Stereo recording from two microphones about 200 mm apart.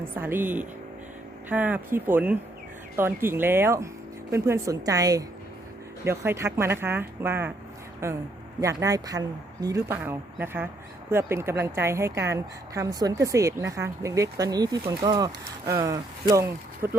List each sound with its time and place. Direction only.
0.0 s a woman's voice: 10° right (ahead or behind)